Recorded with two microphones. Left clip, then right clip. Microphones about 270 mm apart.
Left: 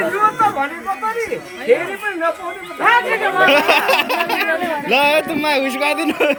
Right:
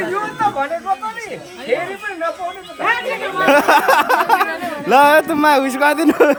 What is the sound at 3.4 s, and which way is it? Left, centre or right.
Speech, centre.